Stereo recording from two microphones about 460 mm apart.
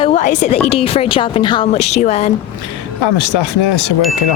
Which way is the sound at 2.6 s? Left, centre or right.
Left.